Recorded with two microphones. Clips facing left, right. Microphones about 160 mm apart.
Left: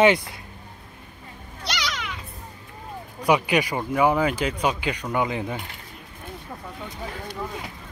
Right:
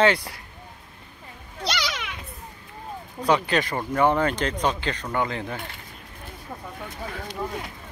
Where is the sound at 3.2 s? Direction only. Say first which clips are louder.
Left 1 dB; 10° left (ahead or behind).